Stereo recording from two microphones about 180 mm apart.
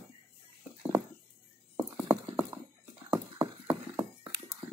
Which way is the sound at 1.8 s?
10° right (ahead or behind).